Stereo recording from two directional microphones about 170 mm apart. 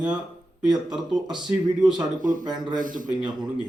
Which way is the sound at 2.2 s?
50° right (ahead or behind).